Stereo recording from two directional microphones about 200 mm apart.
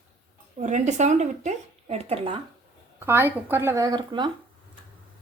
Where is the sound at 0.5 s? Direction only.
40° right (ahead or behind).